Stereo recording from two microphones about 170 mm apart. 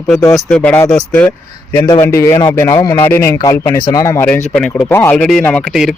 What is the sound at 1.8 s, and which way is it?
Speech, 20° left (ahead or behind).